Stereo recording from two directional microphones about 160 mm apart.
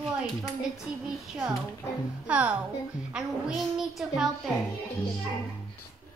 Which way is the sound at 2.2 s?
5° right (ahead or behind).